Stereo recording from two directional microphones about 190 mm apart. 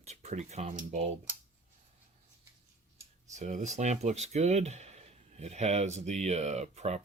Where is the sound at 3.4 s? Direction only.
40° right (ahead or behind).